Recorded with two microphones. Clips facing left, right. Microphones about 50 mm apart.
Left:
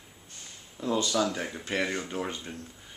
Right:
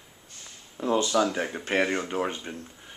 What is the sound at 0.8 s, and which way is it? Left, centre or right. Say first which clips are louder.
Speech: right 4 dB; right.